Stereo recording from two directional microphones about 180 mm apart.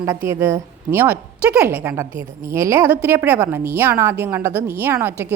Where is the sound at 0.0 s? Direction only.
15° right (ahead or behind).